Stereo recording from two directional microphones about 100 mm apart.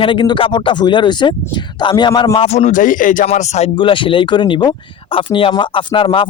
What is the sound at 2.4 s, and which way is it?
Speech, 90° left.